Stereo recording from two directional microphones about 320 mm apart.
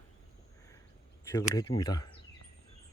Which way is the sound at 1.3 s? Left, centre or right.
Centre.